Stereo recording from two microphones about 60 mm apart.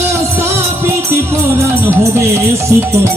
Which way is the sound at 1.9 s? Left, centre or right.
Right.